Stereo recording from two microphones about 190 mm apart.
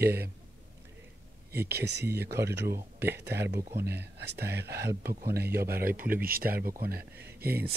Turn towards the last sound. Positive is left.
turn(degrees=-55)  # may be behind; listen again after turning